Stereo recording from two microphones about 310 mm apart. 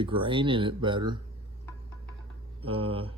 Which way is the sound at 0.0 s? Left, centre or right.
Centre.